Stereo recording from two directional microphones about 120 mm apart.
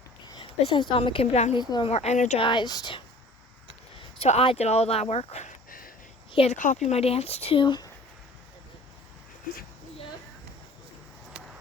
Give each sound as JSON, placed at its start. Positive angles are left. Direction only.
{"t": 0.3, "sound": "speech", "side_deg": 40}
{"t": 1.5, "sound": "speech", "side_deg": 40}
{"t": 1.9, "sound": "speech", "side_deg": 60}
{"t": 2.4, "sound": "speech", "side_deg": 40}
{"t": 4.2, "sound": "speech", "side_deg": 55}
{"t": 11.3, "sound": "vehicle", "side_deg": -10}